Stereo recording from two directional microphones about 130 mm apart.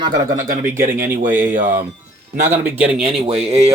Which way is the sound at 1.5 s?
90° right.